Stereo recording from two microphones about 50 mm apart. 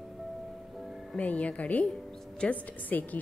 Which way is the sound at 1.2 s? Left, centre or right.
Left.